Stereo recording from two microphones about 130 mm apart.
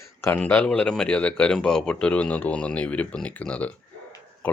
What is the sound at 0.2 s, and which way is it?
A man's voice, 10° left (ahead or behind).